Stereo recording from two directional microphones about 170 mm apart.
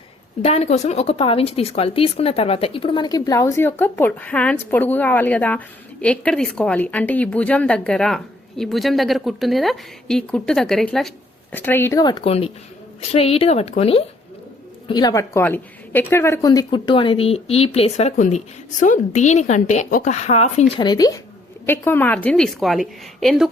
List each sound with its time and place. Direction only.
0.4 s speech: 40° left (ahead or behind)
14.8 s speech: 25° left (ahead or behind); by 20.7 s 40° left (ahead or behind)
20.7 s speech: 25° left (ahead or behind)
21.7 s a woman's voice: 10° left (ahead or behind)